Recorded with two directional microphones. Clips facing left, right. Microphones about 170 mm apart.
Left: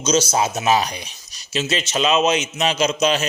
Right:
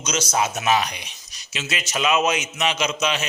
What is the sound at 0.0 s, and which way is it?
A man's voice, 30° left (ahead or behind).